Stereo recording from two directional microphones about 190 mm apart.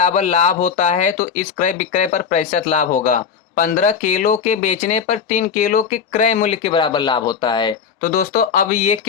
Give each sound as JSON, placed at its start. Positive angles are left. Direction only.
{"t": 0.0, "sound": "speech", "side_deg": 35}
{"t": 8.0, "sound": "speech", "side_deg": 50}